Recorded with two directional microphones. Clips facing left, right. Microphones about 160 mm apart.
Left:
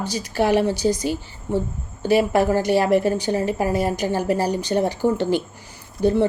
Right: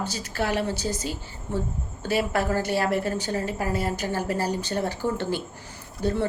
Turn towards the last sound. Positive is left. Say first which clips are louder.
# left 7 dB
turn(degrees=15)  # may be behind; listen again after turning